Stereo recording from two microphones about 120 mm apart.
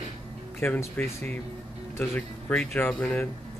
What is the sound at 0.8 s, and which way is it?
Speech, 20° left (ahead or behind).